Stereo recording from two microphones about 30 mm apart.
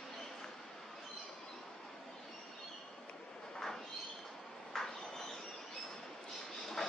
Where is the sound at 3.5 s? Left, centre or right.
Centre.